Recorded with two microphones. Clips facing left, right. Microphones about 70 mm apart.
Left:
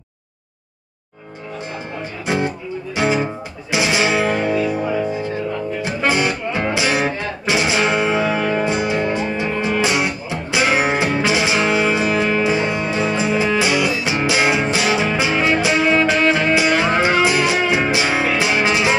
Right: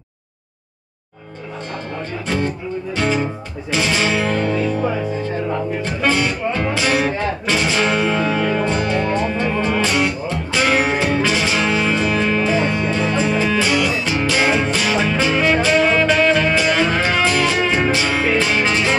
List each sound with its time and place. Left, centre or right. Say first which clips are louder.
2.2 s music: left 2 dB; centre